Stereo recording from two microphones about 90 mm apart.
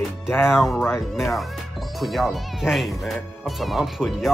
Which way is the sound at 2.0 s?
Centre (ahead or behind).